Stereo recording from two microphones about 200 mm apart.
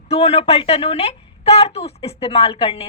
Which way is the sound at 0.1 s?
30° left (ahead or behind).